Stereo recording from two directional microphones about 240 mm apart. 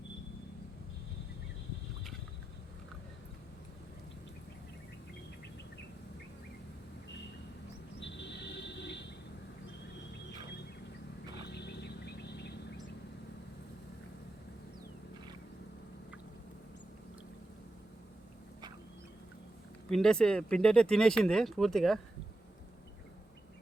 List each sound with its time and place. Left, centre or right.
7.9 s a sound: left
11.4 s vehicle: left
19.9 s speech: centre